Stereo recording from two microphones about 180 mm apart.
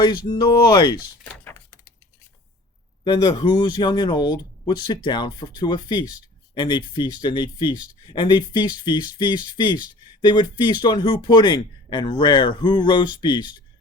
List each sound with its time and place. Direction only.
0.0 s speech: 25° left (ahead or behind)
1.2 s a sound: 10° left (ahead or behind)
3.0 s speech: 25° left (ahead or behind)